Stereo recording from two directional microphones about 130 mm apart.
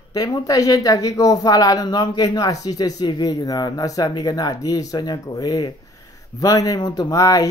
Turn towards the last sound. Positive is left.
turn(degrees=25)  # may be behind; listen again after turning